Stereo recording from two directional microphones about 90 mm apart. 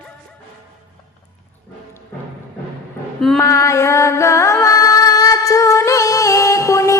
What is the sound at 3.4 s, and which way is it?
Music, 35° left (ahead or behind).